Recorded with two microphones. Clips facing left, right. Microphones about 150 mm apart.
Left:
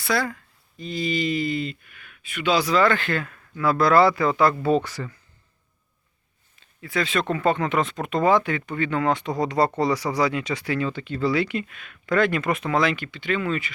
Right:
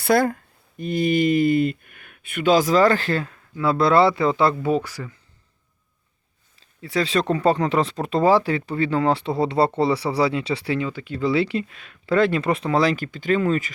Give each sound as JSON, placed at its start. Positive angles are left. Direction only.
{"t": 0.0, "sound": "a man's voice", "side_deg": -50}
{"t": 4.6, "sound": "speech", "side_deg": -10}
{"t": 6.6, "sound": "speech", "side_deg": -30}
{"t": 10.8, "sound": "speech", "side_deg": -10}
{"t": 11.2, "sound": "speech", "side_deg": -25}